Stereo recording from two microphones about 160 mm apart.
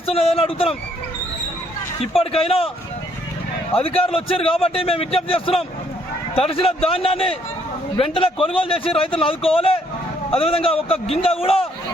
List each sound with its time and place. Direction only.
0.0 s a man's voice: 35° left (ahead or behind)
2.1 s a man's voice: 35° left (ahead or behind)
3.8 s a man's voice: 35° left (ahead or behind)